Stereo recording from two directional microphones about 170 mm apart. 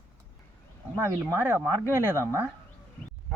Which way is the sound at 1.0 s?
15° right (ahead or behind).